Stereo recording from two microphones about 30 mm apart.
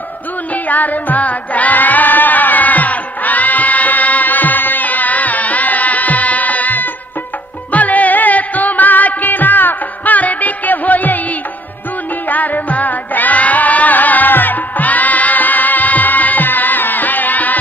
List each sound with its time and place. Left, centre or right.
0.7 s music: left
7.7 s music: left
12.3 s music: left